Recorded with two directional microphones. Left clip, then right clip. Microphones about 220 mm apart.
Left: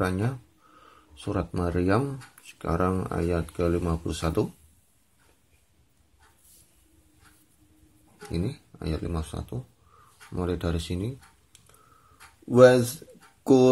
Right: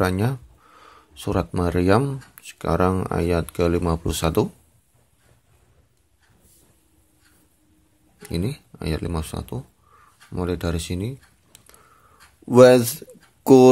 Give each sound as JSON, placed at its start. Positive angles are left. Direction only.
{"t": 0.0, "sound": "speech", "side_deg": -25}
{"t": 8.2, "sound": "speech", "side_deg": -25}